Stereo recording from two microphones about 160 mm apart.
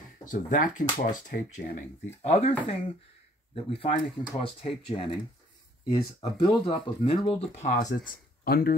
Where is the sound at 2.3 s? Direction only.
40° left (ahead or behind).